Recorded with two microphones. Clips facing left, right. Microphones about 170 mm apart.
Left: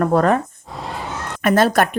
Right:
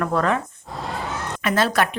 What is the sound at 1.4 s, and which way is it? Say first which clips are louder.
Speech: left 5 dB; 45° left (ahead or behind).